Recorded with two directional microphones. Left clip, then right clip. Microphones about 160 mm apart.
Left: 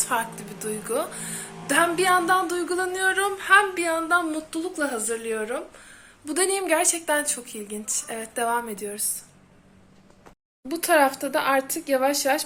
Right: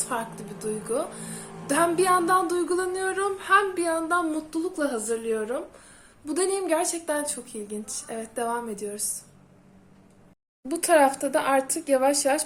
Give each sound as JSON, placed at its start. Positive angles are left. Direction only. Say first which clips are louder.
{"t": 0.1, "sound": "a woman's voice", "louder": "left 3 dB", "side_deg": -15}
{"t": 6.2, "sound": "a woman's voice", "louder": "left 2 dB", "side_deg": -15}
{"t": 10.7, "sound": "a woman's voice", "louder": "even", "side_deg": -10}